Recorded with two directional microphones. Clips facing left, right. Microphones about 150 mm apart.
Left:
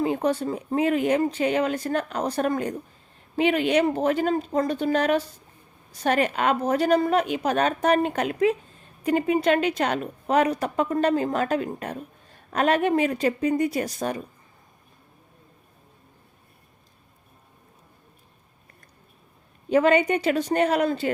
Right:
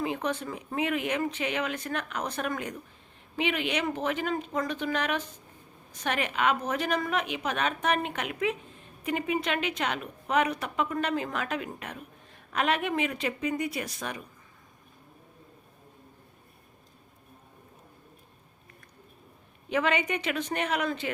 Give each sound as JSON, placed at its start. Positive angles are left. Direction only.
{"t": 0.0, "sound": "a woman's voice", "side_deg": 35}
{"t": 19.7, "sound": "a woman's voice", "side_deg": 35}